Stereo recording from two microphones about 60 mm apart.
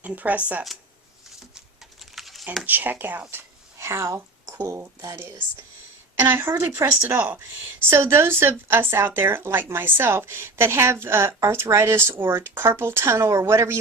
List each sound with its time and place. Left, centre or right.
0.0 s speech: right
1.5 s typing: centre
2.6 s speech: right
3.2 s a sound: right
4.7 s a woman's voice: right
6.1 s speech: right
7.9 s a woman's voice: right